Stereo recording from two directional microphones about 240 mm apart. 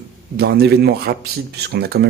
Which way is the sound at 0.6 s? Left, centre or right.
Right.